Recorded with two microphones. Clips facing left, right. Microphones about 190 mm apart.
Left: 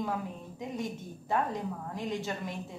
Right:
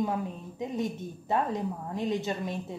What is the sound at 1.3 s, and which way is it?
A woman's voice, 20° right (ahead or behind).